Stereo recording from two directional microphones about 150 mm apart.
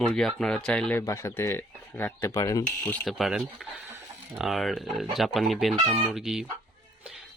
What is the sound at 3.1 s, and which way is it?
Speech, centre (ahead or behind).